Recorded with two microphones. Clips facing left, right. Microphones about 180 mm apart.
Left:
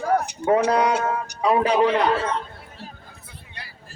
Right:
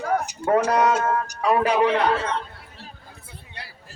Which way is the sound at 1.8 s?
30° left (ahead or behind).